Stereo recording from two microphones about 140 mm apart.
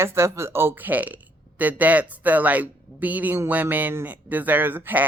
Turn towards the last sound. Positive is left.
turn(degrees=-15)  # may be behind; listen again after turning